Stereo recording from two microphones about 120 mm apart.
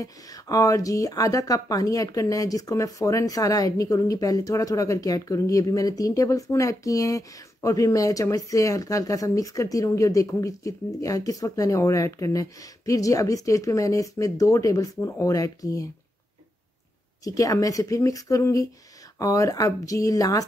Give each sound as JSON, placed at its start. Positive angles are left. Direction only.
{"t": 0.0, "sound": "speech", "side_deg": 30}
{"t": 17.2, "sound": "speech", "side_deg": 30}